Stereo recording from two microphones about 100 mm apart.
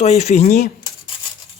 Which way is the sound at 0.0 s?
90° left.